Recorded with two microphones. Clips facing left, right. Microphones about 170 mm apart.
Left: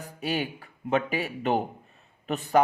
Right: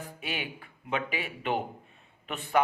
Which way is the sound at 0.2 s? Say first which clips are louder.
Left 9 dB; 40° left (ahead or behind).